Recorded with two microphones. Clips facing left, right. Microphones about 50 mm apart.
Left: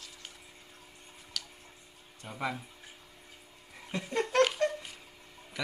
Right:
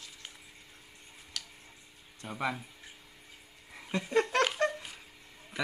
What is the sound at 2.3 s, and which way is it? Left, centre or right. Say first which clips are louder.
Speech: right 2 dB; centre.